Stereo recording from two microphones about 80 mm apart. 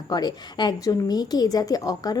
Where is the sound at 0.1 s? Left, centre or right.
Left.